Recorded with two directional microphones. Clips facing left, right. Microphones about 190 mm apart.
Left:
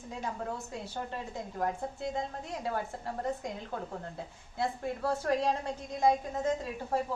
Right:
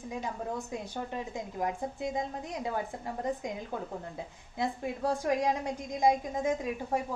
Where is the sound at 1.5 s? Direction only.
15° right (ahead or behind).